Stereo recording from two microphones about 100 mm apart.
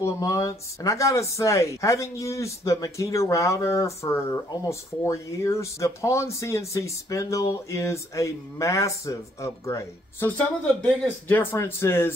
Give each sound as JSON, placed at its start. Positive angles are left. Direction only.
{"t": 0.0, "sound": "speech", "side_deg": 35}
{"t": 10.2, "sound": "speech", "side_deg": 15}